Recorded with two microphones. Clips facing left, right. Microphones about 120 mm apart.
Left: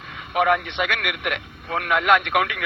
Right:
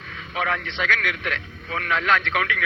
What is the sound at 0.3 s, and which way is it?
A man's voice, 15° left (ahead or behind).